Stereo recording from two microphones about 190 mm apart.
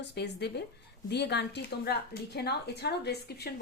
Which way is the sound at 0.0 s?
65° left (ahead or behind).